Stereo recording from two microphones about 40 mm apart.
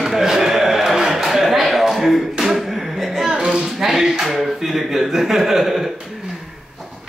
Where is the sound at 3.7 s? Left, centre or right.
Centre.